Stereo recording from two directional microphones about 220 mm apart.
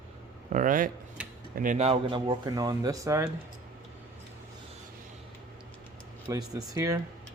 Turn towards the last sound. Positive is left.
turn(degrees=-15)  # may be behind; listen again after turning